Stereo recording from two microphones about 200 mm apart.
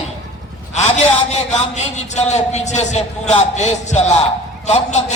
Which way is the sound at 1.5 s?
35° left (ahead or behind).